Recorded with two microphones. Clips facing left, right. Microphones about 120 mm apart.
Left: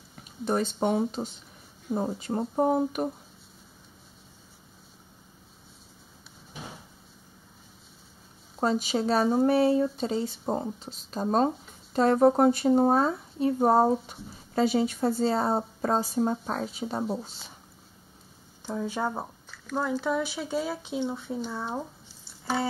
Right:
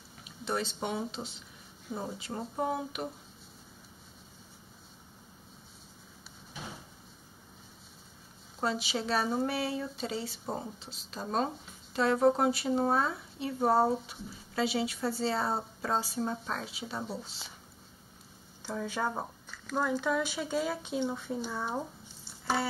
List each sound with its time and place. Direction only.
0.2 s speech: 45° left (ahead or behind)
8.5 s speech: 45° left (ahead or behind)
18.7 s speech: 15° left (ahead or behind)